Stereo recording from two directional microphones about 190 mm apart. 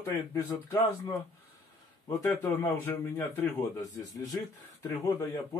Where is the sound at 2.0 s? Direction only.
15° left (ahead or behind).